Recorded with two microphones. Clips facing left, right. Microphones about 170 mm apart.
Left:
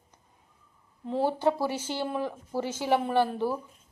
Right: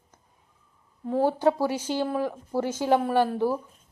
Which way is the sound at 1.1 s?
45° right (ahead or behind).